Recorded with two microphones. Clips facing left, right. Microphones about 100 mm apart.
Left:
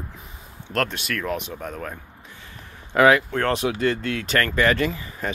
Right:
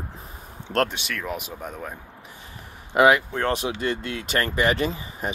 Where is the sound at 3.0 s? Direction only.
25° right (ahead or behind).